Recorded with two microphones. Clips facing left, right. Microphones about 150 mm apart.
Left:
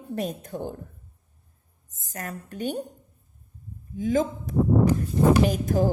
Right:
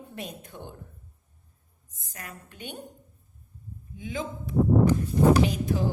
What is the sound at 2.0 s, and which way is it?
Speech, 45° left (ahead or behind).